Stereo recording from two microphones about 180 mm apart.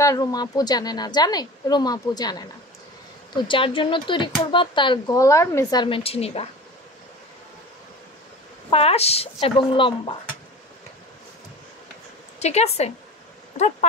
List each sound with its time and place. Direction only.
0.0 s speech: 20° left (ahead or behind)
3.4 s speech: 30° left (ahead or behind)
8.6 s speech: 35° left (ahead or behind)
12.4 s speech: 35° left (ahead or behind)